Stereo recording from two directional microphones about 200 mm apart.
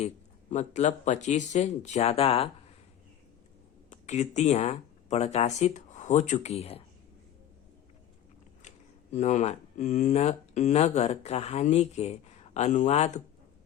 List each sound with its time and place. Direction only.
0.5 s speech: 35° left (ahead or behind)
3.8 s speech: 35° left (ahead or behind)
9.1 s speech: 35° left (ahead or behind)